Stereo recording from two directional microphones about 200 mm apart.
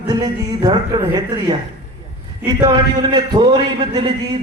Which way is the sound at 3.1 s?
20° right (ahead or behind).